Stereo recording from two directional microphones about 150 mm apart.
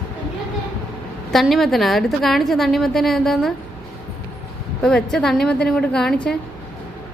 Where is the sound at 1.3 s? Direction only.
Centre (ahead or behind).